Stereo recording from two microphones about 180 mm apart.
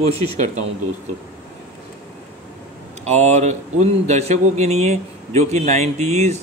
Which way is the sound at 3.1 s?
40° right (ahead or behind).